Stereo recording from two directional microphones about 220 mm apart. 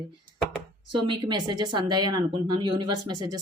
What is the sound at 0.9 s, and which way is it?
Speech, 20° right (ahead or behind).